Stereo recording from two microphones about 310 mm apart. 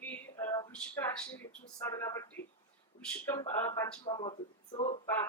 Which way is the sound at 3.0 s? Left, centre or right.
Centre.